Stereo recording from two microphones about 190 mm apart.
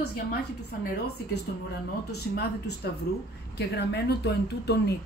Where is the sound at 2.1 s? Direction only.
60° left (ahead or behind).